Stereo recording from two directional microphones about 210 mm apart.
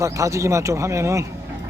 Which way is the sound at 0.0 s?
15° right (ahead or behind).